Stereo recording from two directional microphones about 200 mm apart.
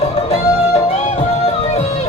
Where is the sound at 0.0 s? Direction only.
30° left (ahead or behind).